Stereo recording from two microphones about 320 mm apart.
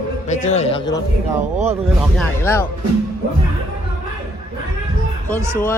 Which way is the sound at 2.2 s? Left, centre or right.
Centre.